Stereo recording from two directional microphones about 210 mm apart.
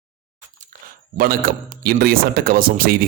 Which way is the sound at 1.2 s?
45° right (ahead or behind).